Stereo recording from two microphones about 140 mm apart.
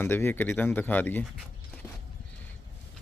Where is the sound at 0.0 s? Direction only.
15° left (ahead or behind).